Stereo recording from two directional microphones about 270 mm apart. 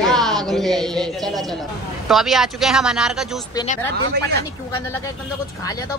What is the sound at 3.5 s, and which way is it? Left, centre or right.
Speech, left.